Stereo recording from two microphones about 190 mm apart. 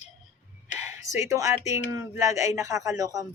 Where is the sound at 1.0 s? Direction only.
15° right (ahead or behind).